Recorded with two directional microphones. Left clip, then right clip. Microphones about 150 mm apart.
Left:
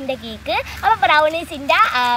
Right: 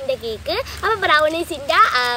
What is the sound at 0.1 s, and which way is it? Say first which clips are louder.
Speech: left 1 dB; 30° right (ahead or behind).